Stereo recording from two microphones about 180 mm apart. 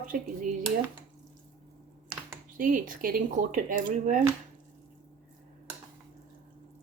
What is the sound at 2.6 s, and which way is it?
Speech, 50° right (ahead or behind).